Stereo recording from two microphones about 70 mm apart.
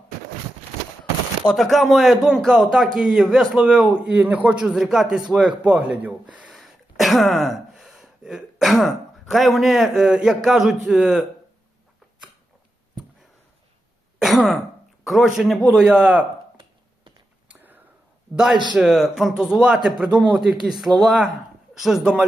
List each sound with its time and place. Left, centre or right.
1.5 s a man's voice: centre
6.6 s speech: centre
14.2 s throat clearing: centre
15.0 s a man's voice: centre
15.7 s a man's voice: centre
17.5 s a sound: right
18.7 s a man's voice: centre